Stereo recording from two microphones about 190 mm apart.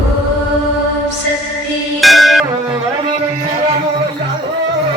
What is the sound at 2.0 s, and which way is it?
Music, centre (ahead or behind).